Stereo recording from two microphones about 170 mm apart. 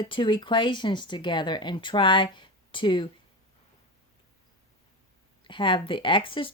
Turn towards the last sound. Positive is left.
turn(degrees=30)  # may be behind; listen again after turning